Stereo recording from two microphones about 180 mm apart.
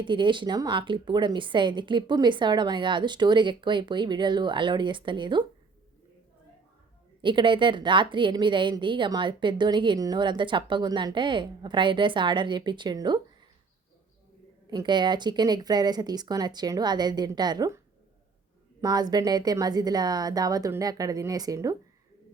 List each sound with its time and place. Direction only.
0.0 s a woman's voice: 25° right (ahead or behind)
7.2 s a woman's voice: 25° right (ahead or behind)
14.7 s a woman's voice: 25° right (ahead or behind)
18.8 s a woman's voice: 20° right (ahead or behind)